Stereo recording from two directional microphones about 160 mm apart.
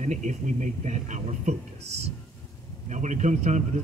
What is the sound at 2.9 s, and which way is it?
Speech, 50° right (ahead or behind).